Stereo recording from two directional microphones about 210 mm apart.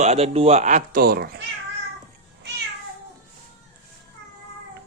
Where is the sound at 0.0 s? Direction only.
30° right (ahead or behind); by 1.4 s 45° right (ahead or behind).